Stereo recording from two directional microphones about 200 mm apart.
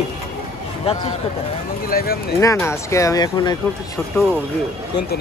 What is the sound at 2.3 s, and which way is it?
Speech, 15° left (ahead or behind).